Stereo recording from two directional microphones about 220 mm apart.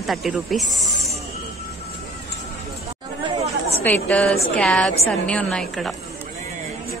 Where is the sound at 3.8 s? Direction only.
5° left (ahead or behind).